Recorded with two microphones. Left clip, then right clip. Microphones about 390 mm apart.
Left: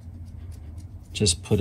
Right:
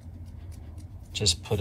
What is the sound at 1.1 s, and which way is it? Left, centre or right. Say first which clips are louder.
Speech: left 3 dB; centre.